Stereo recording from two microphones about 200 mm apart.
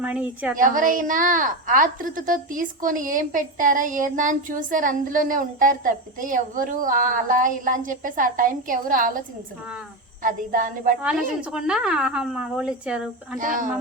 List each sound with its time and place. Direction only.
0.0 s a woman's voice: 5° right (ahead or behind)
0.6 s a woman's voice: 40° right (ahead or behind)
10.2 s a woman's voice: 40° right (ahead or behind)
11.0 s a woman's voice: 5° right (ahead or behind)
13.4 s a woman's voice: 40° right (ahead or behind)